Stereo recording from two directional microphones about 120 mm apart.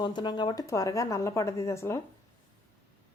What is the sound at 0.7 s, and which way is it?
Speech, 25° left (ahead or behind).